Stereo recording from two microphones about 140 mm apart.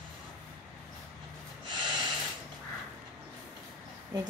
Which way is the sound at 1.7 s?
35° right (ahead or behind).